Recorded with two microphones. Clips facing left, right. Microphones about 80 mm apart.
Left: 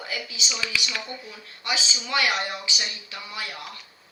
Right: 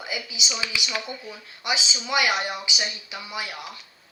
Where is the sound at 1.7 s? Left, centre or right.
Centre.